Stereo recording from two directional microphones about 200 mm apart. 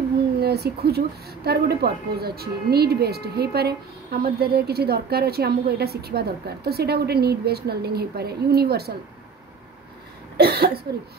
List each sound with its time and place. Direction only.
0.4 s a woman's voice: 50° right (ahead or behind)
10.3 s a woman's voice: 50° right (ahead or behind)